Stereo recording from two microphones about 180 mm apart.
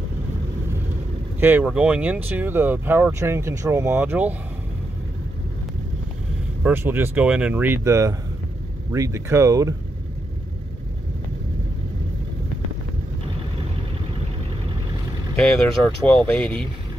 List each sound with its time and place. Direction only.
1.4 s speech: 10° right (ahead or behind)
6.6 s speech: 10° right (ahead or behind)
15.3 s speech: 5° left (ahead or behind)